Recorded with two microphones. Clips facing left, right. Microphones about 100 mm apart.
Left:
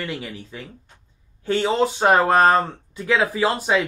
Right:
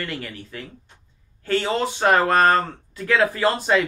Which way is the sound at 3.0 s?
5° left (ahead or behind).